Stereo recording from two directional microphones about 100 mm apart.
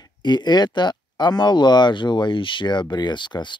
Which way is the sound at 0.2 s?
45° left (ahead or behind).